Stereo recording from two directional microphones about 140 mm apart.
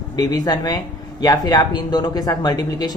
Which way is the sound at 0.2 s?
25° left (ahead or behind).